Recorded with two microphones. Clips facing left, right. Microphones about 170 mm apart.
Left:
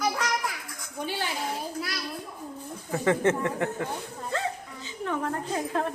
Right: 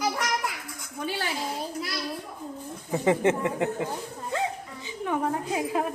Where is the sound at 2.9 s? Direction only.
20° right (ahead or behind).